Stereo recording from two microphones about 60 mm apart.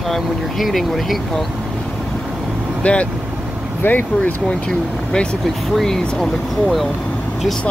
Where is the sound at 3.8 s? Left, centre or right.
Left.